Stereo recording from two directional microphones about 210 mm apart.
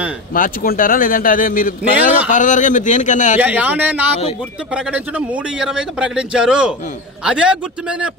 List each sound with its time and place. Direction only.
0.3 s speech: 40° left (ahead or behind)
3.3 s a man's voice: 5° right (ahead or behind)